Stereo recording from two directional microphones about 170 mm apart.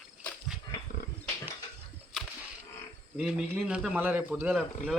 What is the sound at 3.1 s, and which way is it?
A man's voice, 5° right (ahead or behind).